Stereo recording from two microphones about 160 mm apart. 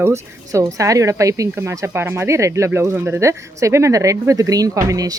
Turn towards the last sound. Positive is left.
turn(degrees=-20)  # may be behind; listen again after turning